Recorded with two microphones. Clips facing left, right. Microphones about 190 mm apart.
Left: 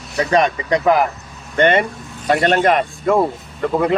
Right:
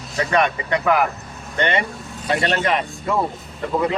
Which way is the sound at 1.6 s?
50° left (ahead or behind).